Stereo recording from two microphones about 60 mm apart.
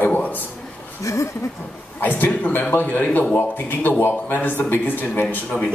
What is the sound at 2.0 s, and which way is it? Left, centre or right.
Speech, left.